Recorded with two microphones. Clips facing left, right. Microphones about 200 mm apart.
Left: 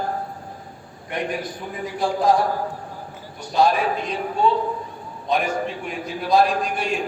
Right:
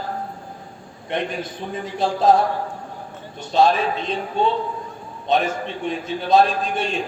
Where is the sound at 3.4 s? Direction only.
25° right (ahead or behind).